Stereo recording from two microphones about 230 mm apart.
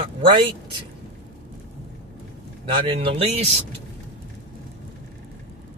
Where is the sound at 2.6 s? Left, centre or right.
Right.